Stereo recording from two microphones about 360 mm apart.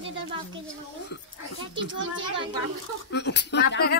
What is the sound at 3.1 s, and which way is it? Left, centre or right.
Speech, left.